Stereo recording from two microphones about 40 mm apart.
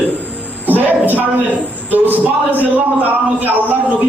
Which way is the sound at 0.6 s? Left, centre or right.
Right.